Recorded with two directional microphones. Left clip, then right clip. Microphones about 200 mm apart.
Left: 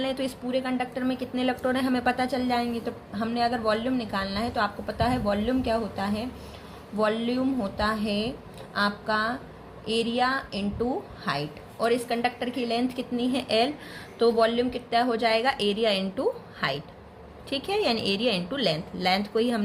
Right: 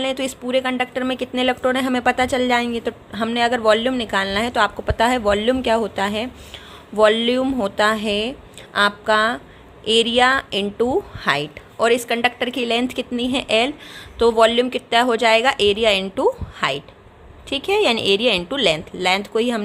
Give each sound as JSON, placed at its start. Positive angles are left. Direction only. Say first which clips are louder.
{"t": 0.0, "sound": "a woman's voice", "louder": "right 6 dB", "side_deg": -30}